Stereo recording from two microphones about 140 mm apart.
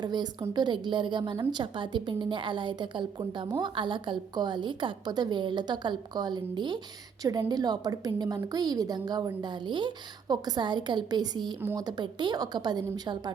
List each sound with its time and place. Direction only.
0.0 s a woman's voice: 30° right (ahead or behind)